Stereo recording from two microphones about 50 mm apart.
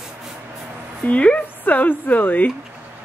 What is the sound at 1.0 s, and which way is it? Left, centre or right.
Speech, left.